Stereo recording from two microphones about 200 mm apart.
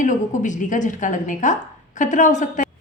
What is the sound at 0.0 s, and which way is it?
A woman's voice, 40° left (ahead or behind).